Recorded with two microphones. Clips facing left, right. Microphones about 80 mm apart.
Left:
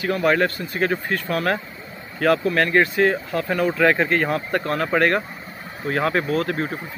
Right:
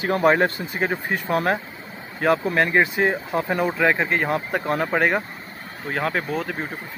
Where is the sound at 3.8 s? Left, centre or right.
Centre.